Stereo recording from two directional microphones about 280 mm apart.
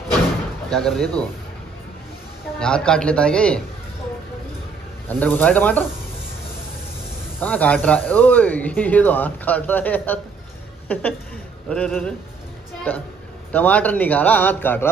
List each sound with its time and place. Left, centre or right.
0.7 s speech: centre
2.6 s speech: centre
5.0 s speech: centre
7.3 s a woman's voice: centre
13.5 s speech: centre